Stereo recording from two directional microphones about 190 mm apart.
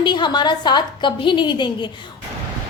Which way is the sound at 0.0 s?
25° left (ahead or behind).